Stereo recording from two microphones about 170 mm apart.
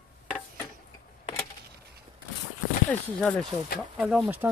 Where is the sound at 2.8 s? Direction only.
5° left (ahead or behind).